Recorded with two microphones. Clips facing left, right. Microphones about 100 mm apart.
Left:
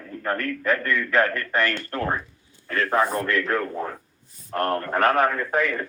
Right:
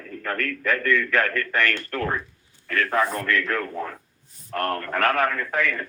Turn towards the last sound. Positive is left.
turn(degrees=25)  # may be behind; listen again after turning